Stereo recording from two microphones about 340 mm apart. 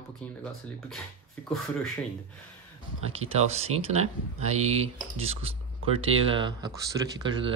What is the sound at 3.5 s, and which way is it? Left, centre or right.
Speech, centre.